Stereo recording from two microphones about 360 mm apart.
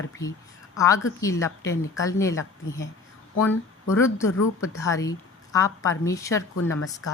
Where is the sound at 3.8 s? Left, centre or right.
Centre.